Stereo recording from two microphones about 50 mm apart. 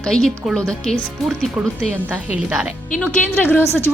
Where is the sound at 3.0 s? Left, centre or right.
Left.